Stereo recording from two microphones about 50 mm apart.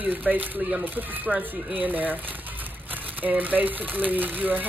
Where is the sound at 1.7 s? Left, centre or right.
Right.